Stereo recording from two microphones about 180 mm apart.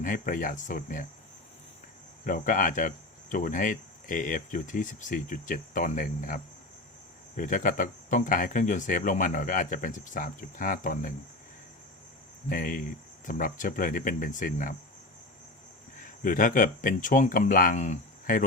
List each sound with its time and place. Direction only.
0.0 s speech: 50° left (ahead or behind)
2.2 s speech: 50° left (ahead or behind)
12.5 s speech: 50° left (ahead or behind)
16.2 s speech: 50° left (ahead or behind)